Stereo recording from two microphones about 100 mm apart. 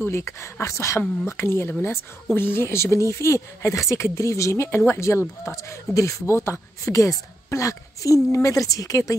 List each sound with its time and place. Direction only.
0.0 s speech: 25° left (ahead or behind)